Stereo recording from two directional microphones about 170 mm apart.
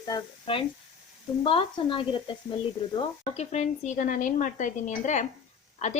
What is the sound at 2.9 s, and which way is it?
Speech, 40° left (ahead or behind).